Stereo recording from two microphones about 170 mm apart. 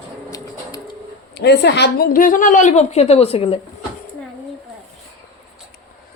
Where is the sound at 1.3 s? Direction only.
75° left (ahead or behind).